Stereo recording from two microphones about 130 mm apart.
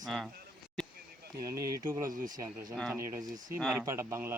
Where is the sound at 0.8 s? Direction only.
5° left (ahead or behind).